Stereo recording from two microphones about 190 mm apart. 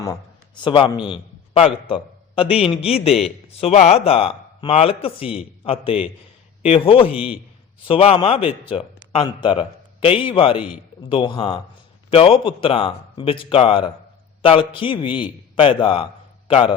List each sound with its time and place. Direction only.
0.0 s a man's voice: 20° left (ahead or behind)
7.1 s a man's voice: 5° right (ahead or behind)
7.9 s a man's voice: 30° left (ahead or behind)